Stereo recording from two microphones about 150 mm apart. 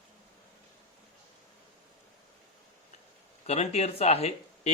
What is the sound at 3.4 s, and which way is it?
Speech, 45° left (ahead or behind).